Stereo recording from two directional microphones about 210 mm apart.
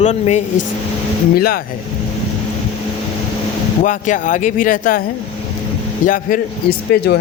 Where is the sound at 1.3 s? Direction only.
45° left (ahead or behind).